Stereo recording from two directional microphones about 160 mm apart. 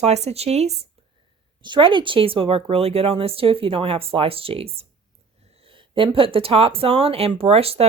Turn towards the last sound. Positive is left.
turn(degrees=-40)  # may be behind; listen again after turning